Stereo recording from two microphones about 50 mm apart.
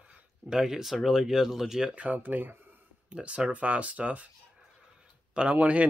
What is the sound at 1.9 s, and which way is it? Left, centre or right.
Speech, right.